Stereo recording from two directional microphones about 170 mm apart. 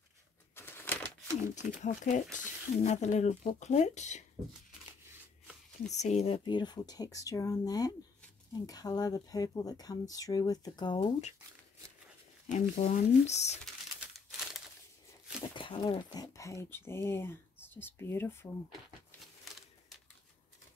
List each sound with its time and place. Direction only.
0.6 s typewriter: 15° left (ahead or behind)
1.0 s speech: 45° left (ahead or behind)
5.9 s speech: 40° left (ahead or behind)
12.7 s speech: 40° left (ahead or behind)
14.1 s crumpling: centre (ahead or behind)
15.5 s speech: 30° left (ahead or behind)